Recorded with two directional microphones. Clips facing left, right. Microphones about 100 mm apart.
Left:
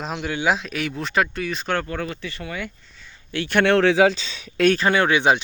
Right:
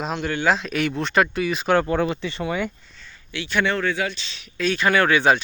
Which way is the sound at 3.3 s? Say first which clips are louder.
Left 5 dB; 55° left (ahead or behind).